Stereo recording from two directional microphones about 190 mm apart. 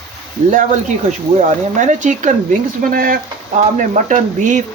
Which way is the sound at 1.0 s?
40° right (ahead or behind).